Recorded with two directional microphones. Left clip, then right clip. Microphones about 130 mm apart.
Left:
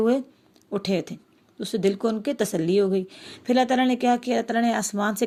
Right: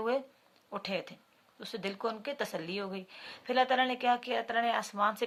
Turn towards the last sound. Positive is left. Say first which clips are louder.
# left 5 dB
turn(degrees=45)  # may be behind; listen again after turning